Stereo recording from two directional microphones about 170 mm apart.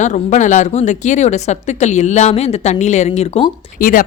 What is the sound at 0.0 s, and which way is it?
Speech, 45° left (ahead or behind).